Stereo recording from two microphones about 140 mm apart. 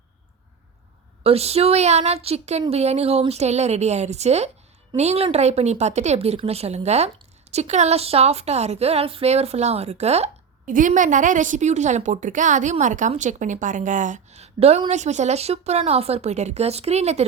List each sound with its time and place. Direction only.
1.2 s speech: 45° right (ahead or behind)
10.7 s a woman's voice: 65° right (ahead or behind); by 17.2 s 50° right (ahead or behind)